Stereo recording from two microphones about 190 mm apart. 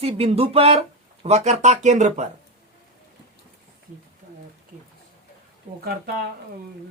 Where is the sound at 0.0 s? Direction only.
30° right (ahead or behind).